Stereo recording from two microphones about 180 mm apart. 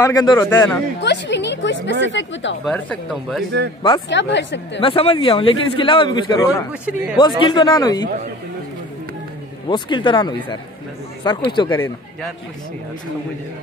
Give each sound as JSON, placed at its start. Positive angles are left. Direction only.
{"t": 0.0, "sound": "a man's voice", "side_deg": 20}
{"t": 1.0, "sound": "speech", "side_deg": 75}
{"t": 2.6, "sound": "speech", "side_deg": 5}
{"t": 4.1, "sound": "speech", "side_deg": 80}
{"t": 4.7, "sound": "a man's voice", "side_deg": 30}
{"t": 6.7, "sound": "speech", "side_deg": -5}
{"t": 7.2, "sound": "a man's voice", "side_deg": 25}
{"t": 9.7, "sound": "a man's voice", "side_deg": 25}
{"t": 11.7, "sound": "speech", "side_deg": 10}